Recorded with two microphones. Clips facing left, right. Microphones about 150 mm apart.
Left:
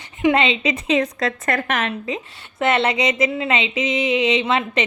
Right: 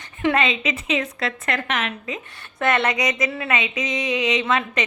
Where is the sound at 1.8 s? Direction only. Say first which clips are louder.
Left 4 dB; 30° left (ahead or behind).